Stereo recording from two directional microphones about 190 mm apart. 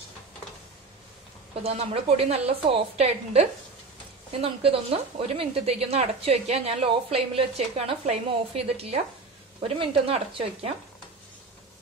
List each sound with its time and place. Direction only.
1.6 s a woman's voice: 30° right (ahead or behind)